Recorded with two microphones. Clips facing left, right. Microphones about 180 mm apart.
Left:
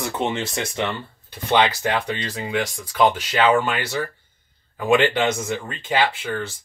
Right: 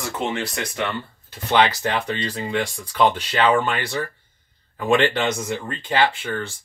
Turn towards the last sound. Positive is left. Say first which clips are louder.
# right 1 dB
turn(degrees=5)  # may be behind; listen again after turning